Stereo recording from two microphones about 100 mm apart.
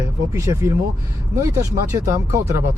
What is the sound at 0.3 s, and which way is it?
Speech, 30° right (ahead or behind).